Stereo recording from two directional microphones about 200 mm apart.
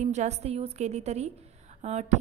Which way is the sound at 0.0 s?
35° right (ahead or behind).